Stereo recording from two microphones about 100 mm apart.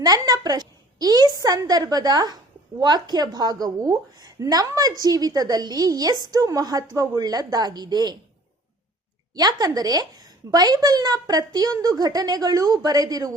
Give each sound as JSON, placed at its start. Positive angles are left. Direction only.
{"t": 0.0, "sound": "a woman's voice", "side_deg": -40}
{"t": 9.3, "sound": "a woman's voice", "side_deg": -40}